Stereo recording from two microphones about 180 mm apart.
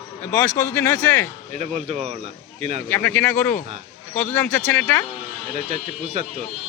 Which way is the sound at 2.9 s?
10° left (ahead or behind).